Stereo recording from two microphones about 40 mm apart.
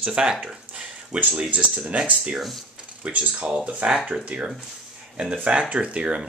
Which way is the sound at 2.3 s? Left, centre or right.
Centre.